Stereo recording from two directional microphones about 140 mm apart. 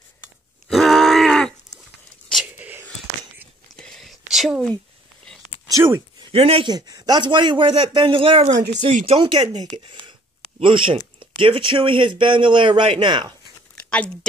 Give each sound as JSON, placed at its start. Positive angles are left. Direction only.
{"t": 0.7, "sound": "groan", "side_deg": 0}
{"t": 2.4, "sound": "whispering", "side_deg": -10}
{"t": 3.8, "sound": "a sound", "side_deg": 0}
{"t": 5.7, "sound": "speech", "side_deg": -20}
{"t": 6.3, "sound": "a man's voice", "side_deg": -45}
{"t": 6.7, "sound": "speech", "side_deg": -30}
{"t": 13.8, "sound": "a sound", "side_deg": 10}